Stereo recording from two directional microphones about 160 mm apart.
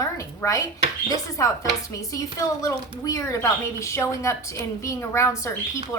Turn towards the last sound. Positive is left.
turn(degrees=15)  # may be behind; listen again after turning